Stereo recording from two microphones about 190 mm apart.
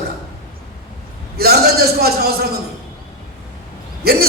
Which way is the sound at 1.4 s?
55° right (ahead or behind).